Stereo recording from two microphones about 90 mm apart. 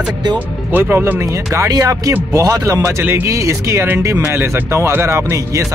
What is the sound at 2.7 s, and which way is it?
Speech, 25° right (ahead or behind).